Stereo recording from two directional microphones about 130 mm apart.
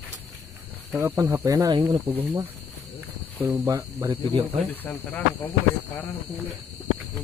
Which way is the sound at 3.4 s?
20° right (ahead or behind).